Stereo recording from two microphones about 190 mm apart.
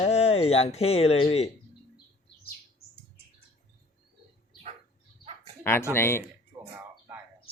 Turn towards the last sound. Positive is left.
turn(degrees=15)  # may be behind; listen again after turning